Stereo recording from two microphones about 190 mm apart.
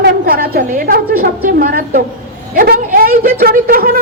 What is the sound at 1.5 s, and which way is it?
A woman's voice, 50° right (ahead or behind).